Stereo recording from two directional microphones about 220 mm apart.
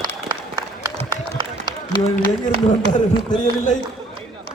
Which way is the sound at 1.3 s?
20° right (ahead or behind).